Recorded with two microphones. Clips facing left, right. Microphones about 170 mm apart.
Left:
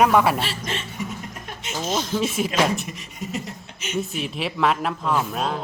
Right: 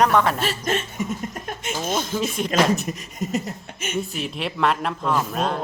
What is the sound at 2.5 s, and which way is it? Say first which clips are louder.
Speech: right 2 dB; 45° right (ahead or behind).